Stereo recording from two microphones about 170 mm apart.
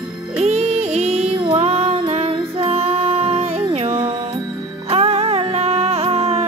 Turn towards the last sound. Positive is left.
turn(degrees=-35)  # may be behind; listen again after turning